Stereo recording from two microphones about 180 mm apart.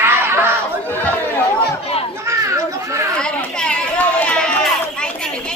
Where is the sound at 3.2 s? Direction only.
5° left (ahead or behind).